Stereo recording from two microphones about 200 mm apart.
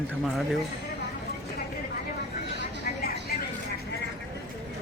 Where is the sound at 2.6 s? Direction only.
50° left (ahead or behind).